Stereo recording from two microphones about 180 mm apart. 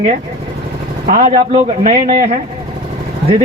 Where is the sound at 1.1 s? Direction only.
45° right (ahead or behind).